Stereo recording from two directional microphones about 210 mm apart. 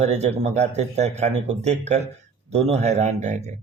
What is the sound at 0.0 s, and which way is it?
Speech, 30° right (ahead or behind).